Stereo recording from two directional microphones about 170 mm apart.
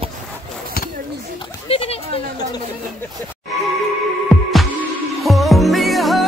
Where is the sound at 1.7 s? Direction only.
35° left (ahead or behind).